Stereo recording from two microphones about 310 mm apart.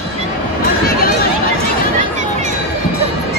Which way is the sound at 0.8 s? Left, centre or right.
Left.